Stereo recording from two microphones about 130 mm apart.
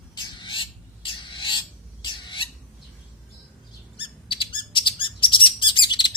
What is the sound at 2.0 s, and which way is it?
Squawk, 35° left (ahead or behind).